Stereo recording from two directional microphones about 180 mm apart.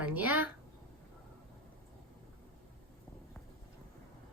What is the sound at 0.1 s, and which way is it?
Speech, 10° right (ahead or behind).